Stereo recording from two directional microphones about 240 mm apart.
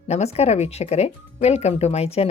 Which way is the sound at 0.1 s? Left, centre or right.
Left.